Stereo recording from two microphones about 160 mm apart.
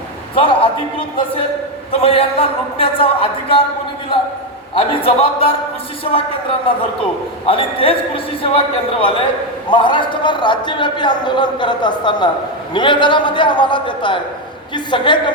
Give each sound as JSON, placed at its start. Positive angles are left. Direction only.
{"t": 0.3, "sound": "a man's voice", "side_deg": 35}
{"t": 4.7, "sound": "a man's voice", "side_deg": 35}